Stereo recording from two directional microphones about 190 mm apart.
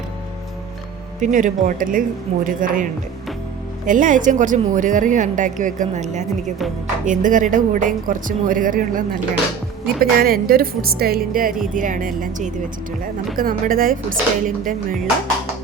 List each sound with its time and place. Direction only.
1.2 s speech: 45° right (ahead or behind)